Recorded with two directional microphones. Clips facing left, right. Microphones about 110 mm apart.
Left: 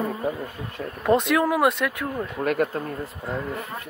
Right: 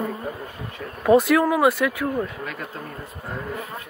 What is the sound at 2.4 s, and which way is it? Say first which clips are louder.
Speech: left 10 dB; 55° left (ahead or behind).